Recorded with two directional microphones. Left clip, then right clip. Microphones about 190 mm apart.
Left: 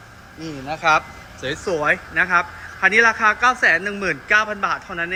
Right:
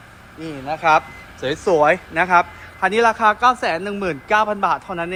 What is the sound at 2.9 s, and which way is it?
A man's voice, 25° right (ahead or behind).